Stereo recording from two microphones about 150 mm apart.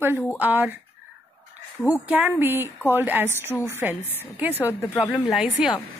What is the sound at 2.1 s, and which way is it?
Speech, 10° right (ahead or behind).